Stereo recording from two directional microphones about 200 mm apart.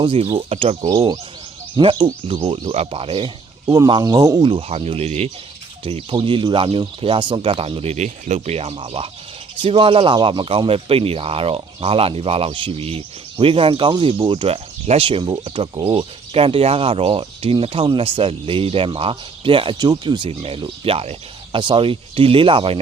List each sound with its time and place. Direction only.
0.0 s speech: 25° right (ahead or behind)
0.8 s speech: 20° right (ahead or behind)